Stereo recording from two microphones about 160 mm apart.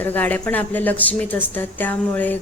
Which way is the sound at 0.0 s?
10° left (ahead or behind).